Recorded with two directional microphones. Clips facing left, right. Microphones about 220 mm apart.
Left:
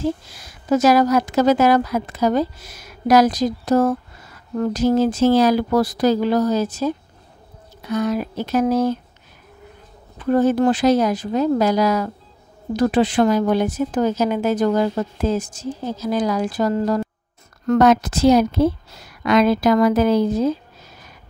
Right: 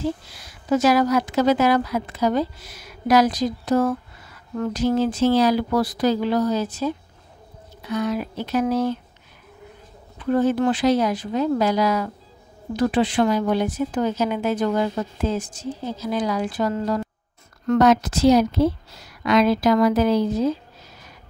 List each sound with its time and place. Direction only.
0.3 s a woman's voice: 45° left (ahead or behind)
10.1 s a woman's voice: 45° left (ahead or behind)
17.6 s a woman's voice: 50° left (ahead or behind)